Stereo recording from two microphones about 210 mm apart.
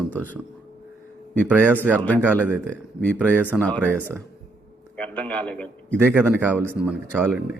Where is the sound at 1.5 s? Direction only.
5° right (ahead or behind).